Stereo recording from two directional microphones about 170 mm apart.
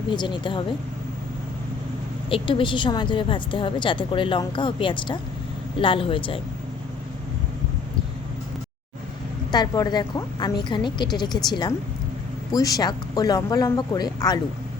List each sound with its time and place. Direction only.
0.1 s a woman's voice: 30° left (ahead or behind)
2.3 s a woman's voice: 30° left (ahead or behind)
9.5 s a woman's voice: 25° left (ahead or behind)